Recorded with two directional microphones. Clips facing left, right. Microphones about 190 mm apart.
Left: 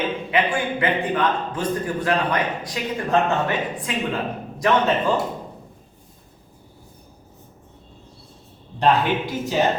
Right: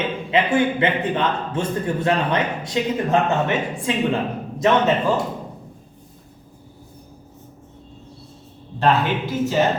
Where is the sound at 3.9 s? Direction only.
25° right (ahead or behind).